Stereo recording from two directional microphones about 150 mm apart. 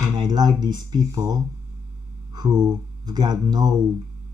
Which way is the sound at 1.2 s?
15° right (ahead or behind).